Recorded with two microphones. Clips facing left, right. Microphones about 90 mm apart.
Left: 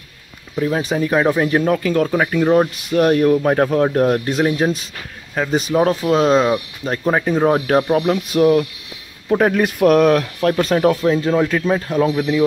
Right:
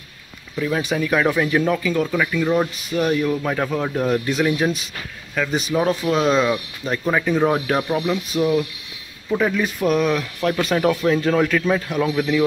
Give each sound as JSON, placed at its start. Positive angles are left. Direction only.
{"t": 0.6, "sound": "speech", "side_deg": 30}
{"t": 1.5, "sound": "speech", "side_deg": 40}
{"t": 2.0, "sound": "speech", "side_deg": 40}
{"t": 2.9, "sound": "speech", "side_deg": 50}
{"t": 4.5, "sound": "speech", "side_deg": 30}
{"t": 8.3, "sound": "speech", "side_deg": 60}
{"t": 10.5, "sound": "speech", "side_deg": 35}